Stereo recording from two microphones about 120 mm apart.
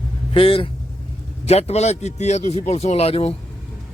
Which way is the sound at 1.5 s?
60° left (ahead or behind).